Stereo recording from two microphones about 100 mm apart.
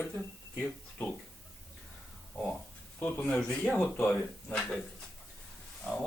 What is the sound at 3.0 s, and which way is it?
Speech, 15° left (ahead or behind).